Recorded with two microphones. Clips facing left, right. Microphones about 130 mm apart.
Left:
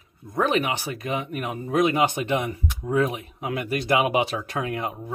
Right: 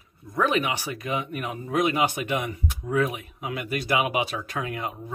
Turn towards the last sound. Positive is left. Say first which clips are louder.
# left 3 dB
turn(degrees=25)  # may be behind; listen again after turning